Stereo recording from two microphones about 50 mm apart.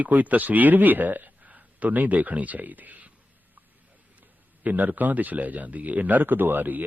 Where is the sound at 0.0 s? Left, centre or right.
Right.